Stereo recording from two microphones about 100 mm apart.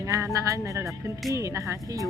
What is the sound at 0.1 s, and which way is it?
Speech, 35° right (ahead or behind).